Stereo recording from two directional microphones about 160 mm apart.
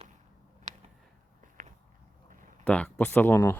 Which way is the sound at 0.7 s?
45° right (ahead or behind).